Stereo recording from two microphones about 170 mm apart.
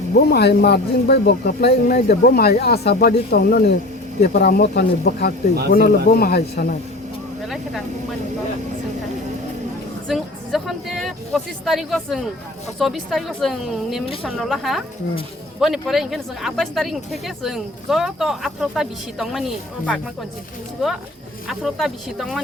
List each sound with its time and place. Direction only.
0.2 s speech: 70° left (ahead or behind)
7.5 s speech: centre (ahead or behind)
10.1 s a woman's voice: centre (ahead or behind)
21.4 s speech: centre (ahead or behind)